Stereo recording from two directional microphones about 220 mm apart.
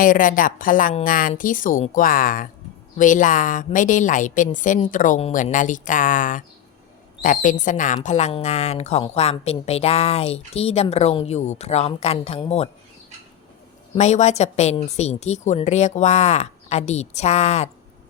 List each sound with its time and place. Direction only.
0.0 s a woman's voice: 40° left (ahead or behind)
13.9 s a woman's voice: 30° left (ahead or behind)